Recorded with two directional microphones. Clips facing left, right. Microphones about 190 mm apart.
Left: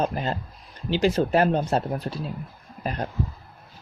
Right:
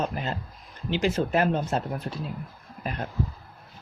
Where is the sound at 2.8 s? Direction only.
40° left (ahead or behind).